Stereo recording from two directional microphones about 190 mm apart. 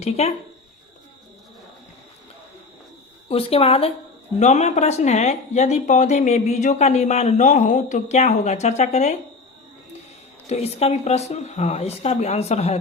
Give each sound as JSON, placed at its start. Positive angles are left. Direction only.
{"t": 0.0, "sound": "speech", "side_deg": 35}
{"t": 3.2, "sound": "speech", "side_deg": 30}
{"t": 10.4, "sound": "speech", "side_deg": 35}